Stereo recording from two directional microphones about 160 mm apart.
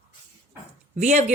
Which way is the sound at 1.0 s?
50° right (ahead or behind).